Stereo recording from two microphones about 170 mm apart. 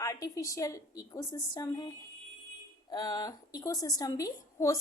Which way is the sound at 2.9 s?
25° left (ahead or behind).